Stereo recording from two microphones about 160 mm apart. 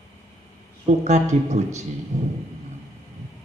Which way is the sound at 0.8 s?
45° right (ahead or behind).